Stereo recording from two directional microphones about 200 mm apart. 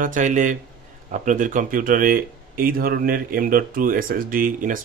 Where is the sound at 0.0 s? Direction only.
40° right (ahead or behind).